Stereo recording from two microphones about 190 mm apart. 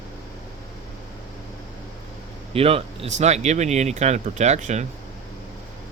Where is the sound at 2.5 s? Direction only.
30° right (ahead or behind).